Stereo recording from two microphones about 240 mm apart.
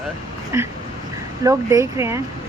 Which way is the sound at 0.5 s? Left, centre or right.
Centre.